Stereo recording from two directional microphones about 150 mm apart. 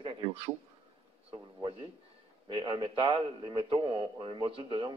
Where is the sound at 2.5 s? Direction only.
35° right (ahead or behind).